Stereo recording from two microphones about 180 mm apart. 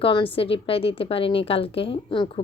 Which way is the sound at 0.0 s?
30° left (ahead or behind).